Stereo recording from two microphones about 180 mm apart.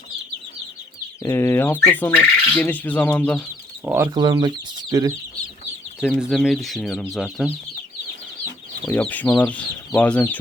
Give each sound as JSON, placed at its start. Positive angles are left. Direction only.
{"t": 1.2, "sound": "chicken", "side_deg": 15}
{"t": 3.8, "sound": "speech", "side_deg": -15}
{"t": 6.0, "sound": "speech", "side_deg": -5}
{"t": 8.9, "sound": "chicken", "side_deg": 10}